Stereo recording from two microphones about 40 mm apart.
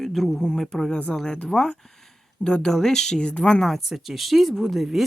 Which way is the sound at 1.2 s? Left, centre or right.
Left.